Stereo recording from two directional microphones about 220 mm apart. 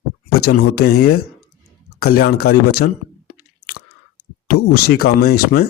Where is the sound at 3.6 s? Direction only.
75° left (ahead or behind).